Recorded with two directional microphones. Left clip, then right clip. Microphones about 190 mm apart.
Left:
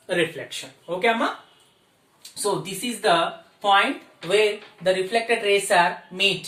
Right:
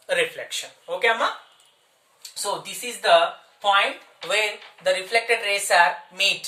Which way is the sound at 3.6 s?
5° right (ahead or behind).